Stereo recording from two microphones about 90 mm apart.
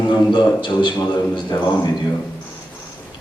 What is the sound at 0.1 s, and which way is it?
Speech, 60° left (ahead or behind).